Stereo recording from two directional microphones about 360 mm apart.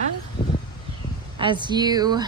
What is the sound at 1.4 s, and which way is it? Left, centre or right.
Speech, centre.